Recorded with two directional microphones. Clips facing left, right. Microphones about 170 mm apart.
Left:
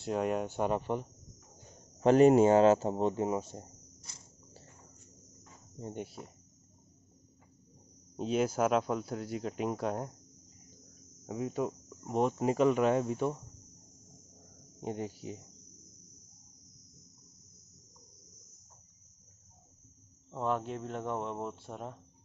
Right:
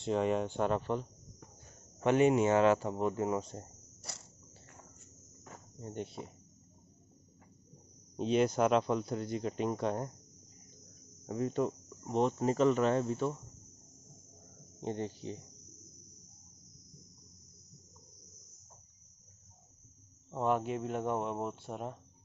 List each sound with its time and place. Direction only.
0.0 s speech: 5° left (ahead or behind)
2.0 s speech: 35° left (ahead or behind)
3.3 s speech: 10° left (ahead or behind)
5.9 s speech: 5° left (ahead or behind)
8.2 s speech: 5° left (ahead or behind)
11.2 s speech: 5° left (ahead or behind)
14.8 s speech: 10° left (ahead or behind)
20.2 s speech: 5° right (ahead or behind)